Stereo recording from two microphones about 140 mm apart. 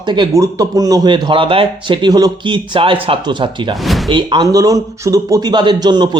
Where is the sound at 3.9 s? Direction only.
Centre (ahead or behind).